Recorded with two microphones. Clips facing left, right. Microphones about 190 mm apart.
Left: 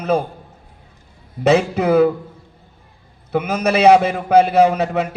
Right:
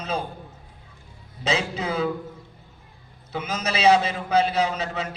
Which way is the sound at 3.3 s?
60° left (ahead or behind).